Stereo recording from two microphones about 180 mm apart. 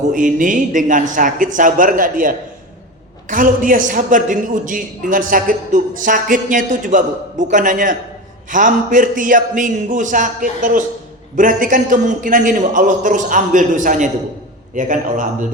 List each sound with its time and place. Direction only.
0.1 s a man's voice: 45° right (ahead or behind)